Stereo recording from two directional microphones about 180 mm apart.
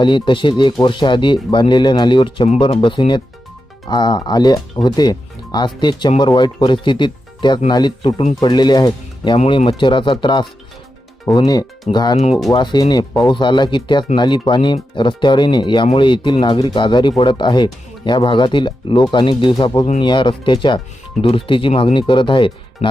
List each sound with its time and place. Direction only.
0.0 s speech: 25° left (ahead or behind)